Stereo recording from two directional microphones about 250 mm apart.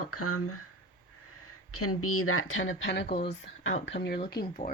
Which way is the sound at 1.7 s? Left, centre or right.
Left.